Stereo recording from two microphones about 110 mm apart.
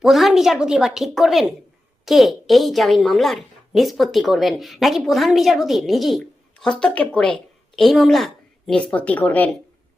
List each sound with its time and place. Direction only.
0.0 s a woman's voice: centre (ahead or behind)
8.9 s speech: 10° left (ahead or behind)